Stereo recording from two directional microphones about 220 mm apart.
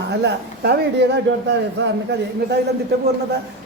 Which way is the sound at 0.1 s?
50° right (ahead or behind).